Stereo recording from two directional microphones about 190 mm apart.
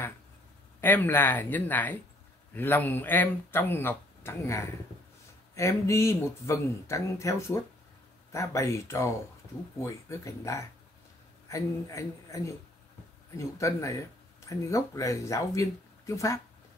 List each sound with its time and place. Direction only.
0.7 s speech: 10° left (ahead or behind)